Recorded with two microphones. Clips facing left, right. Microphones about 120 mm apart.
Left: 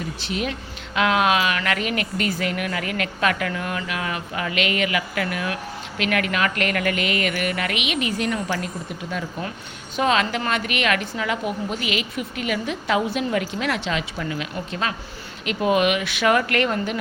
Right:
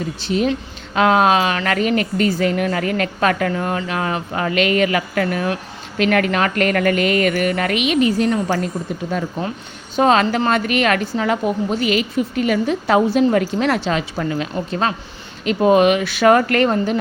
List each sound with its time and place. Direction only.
0.3 s a woman's voice: 30° right (ahead or behind)